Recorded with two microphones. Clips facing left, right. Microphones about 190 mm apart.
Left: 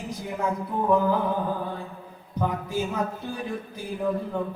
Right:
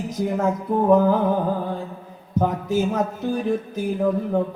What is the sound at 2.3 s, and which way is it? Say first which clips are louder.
Speech: right 6 dB; 45° right (ahead or behind).